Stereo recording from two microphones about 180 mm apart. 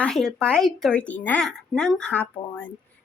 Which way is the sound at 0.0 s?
Centre (ahead or behind).